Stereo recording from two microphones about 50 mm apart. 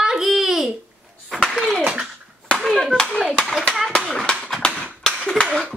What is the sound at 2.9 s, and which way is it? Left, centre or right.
Clapping, centre.